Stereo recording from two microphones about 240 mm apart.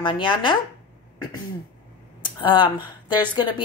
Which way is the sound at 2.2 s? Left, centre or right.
Centre.